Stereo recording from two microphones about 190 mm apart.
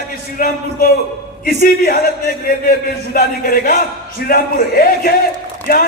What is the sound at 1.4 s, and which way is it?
A man's voice, 50° left (ahead or behind).